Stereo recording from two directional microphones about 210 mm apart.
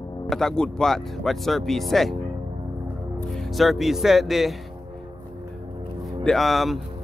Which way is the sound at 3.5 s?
Centre (ahead or behind).